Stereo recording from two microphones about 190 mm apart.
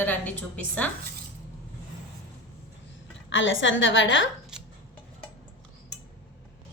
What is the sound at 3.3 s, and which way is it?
A woman's voice, 80° left.